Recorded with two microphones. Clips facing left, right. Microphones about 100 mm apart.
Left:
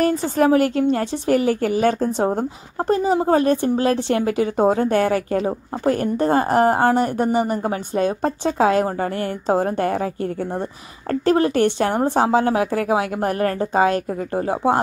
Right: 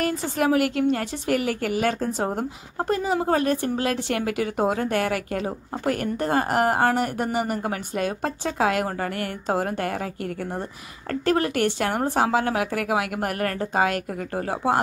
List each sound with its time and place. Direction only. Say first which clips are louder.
0.0 s a woman's voice: left 6 dB; 35° left (ahead or behind)